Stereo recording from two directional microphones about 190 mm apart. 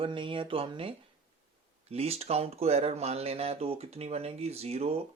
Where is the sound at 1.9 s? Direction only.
30° right (ahead or behind).